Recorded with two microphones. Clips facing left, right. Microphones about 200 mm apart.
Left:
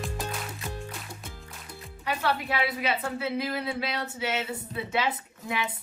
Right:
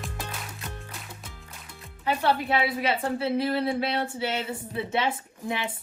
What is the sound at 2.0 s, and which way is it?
A woman's voice, 25° right (ahead or behind).